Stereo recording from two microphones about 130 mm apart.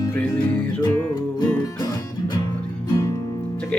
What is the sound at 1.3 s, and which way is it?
Music, 35° left (ahead or behind).